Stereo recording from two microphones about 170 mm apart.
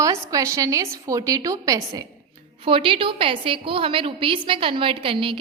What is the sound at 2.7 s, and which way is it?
A woman's voice, 30° right (ahead or behind).